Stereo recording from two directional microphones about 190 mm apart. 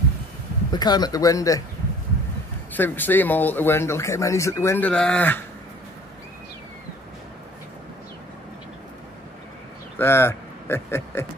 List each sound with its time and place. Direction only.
0.7 s speech: 20° left (ahead or behind)
2.7 s speech: 10° left (ahead or behind)
9.9 s speech: 10° left (ahead or behind)